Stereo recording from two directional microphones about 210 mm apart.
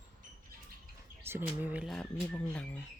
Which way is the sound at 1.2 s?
10° right (ahead or behind).